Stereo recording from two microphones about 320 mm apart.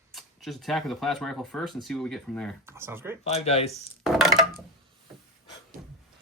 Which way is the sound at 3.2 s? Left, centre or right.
Centre.